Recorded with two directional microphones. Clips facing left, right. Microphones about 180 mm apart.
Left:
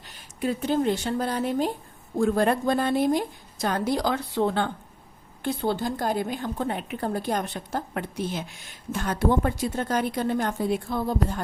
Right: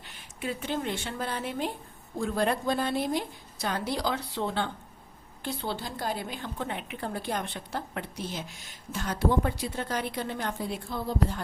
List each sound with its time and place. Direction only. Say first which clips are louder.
0.0 s speech: left 7 dB; 40° left (ahead or behind)
2.1 s a woman's voice: left 6 dB; 50° left (ahead or behind)